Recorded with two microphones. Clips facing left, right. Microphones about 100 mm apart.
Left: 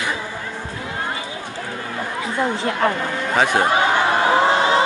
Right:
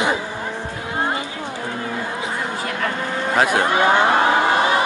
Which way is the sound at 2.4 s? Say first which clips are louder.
Left 4 dB; 25° left (ahead or behind).